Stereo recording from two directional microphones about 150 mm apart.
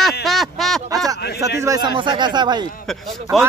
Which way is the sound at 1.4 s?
20° right (ahead or behind).